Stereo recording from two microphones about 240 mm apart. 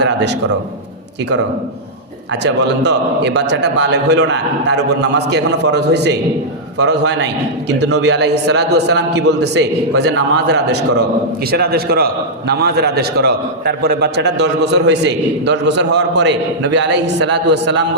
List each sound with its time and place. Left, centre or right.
0.0 s a man's voice: right
2.3 s a man's voice: right